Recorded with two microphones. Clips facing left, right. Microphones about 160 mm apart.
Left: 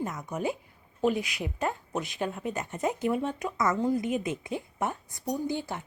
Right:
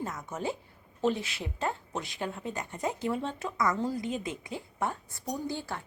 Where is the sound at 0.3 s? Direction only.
15° left (ahead or behind).